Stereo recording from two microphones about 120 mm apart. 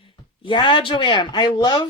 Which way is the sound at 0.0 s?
45° left (ahead or behind).